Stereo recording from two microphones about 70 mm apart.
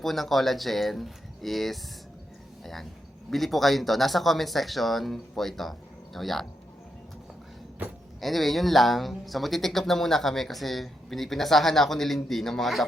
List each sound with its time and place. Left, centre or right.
0.0 s speech: centre
3.2 s speech: centre
8.2 s speech: centre